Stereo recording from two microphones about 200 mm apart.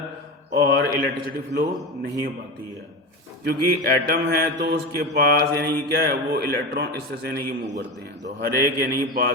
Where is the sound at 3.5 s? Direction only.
50° right (ahead or behind).